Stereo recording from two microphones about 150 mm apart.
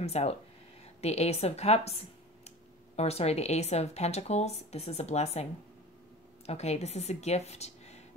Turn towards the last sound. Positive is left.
turn(degrees=45)  # may be behind; listen again after turning